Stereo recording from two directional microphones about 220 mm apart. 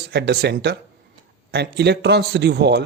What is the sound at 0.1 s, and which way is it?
A man's voice, 50° right (ahead or behind).